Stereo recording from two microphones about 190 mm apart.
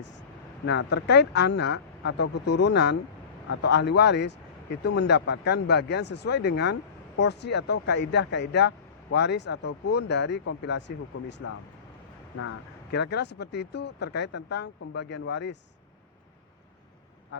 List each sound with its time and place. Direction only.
0.6 s speech: 70° left (ahead or behind)